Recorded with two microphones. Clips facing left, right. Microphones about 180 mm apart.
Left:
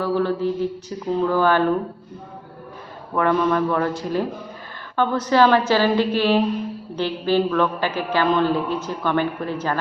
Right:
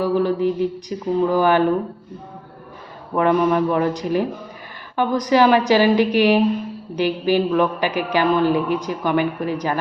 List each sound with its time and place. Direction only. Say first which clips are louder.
0.0 s a woman's voice: right 3 dB; 15° right (ahead or behind)
3.2 s a woman's voice: right 2 dB; 15° right (ahead or behind)